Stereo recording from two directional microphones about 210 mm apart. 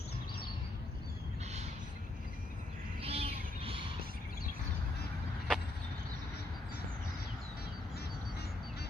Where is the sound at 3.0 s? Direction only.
25° right (ahead or behind).